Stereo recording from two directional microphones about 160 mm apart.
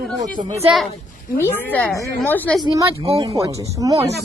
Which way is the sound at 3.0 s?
35° right (ahead or behind).